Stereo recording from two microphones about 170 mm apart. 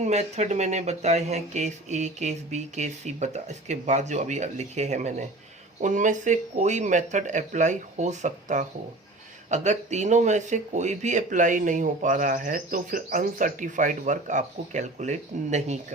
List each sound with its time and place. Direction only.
0.0 s speech: 40° right (ahead or behind)